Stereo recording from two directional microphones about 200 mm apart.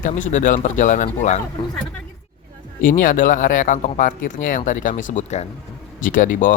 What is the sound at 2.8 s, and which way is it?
Speech, 40° left (ahead or behind).